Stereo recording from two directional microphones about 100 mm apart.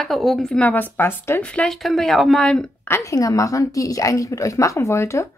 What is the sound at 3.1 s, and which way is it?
A woman's voice, 35° left (ahead or behind).